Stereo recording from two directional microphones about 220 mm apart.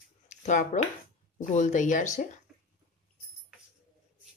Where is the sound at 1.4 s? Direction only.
30° left (ahead or behind).